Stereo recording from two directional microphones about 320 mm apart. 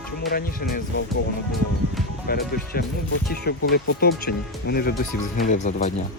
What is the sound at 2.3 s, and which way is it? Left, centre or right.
Speech, left.